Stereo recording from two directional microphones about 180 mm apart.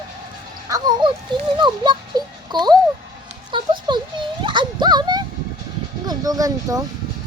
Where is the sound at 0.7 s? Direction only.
25° right (ahead or behind).